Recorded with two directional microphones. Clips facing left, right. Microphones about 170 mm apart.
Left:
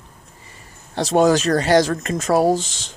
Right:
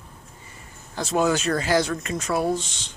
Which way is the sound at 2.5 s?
90° left.